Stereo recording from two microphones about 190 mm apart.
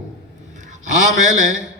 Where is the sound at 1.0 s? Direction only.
40° right (ahead or behind).